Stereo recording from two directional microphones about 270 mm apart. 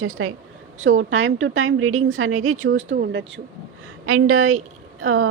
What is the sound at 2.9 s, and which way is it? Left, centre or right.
Speech, right.